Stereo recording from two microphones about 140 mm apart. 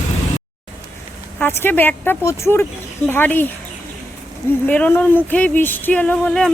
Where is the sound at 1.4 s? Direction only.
15° left (ahead or behind).